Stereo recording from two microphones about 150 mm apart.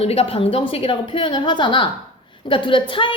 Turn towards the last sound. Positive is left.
turn(degrees=35)  # may be behind; listen again after turning